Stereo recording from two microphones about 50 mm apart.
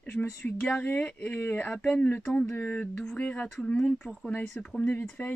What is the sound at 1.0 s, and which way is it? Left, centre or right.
Speech, left.